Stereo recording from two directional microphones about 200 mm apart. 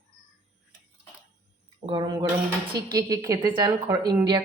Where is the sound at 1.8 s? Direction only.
25° right (ahead or behind).